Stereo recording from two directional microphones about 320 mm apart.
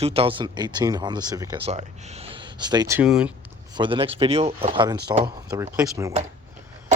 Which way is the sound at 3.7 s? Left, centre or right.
Centre.